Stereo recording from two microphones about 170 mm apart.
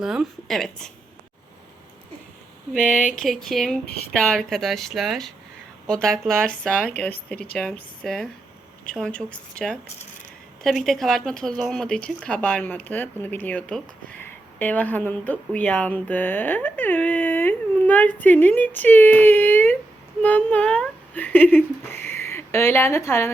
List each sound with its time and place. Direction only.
0.0 s speech: 5° right (ahead or behind)
3.2 s speech: centre (ahead or behind)
3.8 s speech: 70° left (ahead or behind)
4.1 s speech: 5° left (ahead or behind)